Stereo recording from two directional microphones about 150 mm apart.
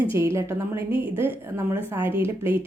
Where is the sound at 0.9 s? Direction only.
35° left (ahead or behind).